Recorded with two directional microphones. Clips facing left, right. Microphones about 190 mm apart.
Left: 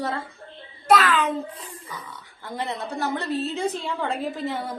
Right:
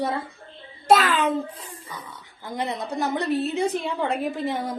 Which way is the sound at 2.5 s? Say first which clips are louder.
Right 2 dB; 15° right (ahead or behind).